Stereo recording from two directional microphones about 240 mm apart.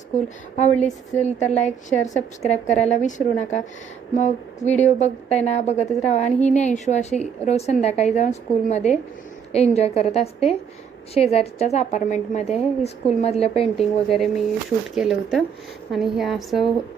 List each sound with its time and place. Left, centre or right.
0.5 s a woman's voice: left
13.7 s a woman's voice: centre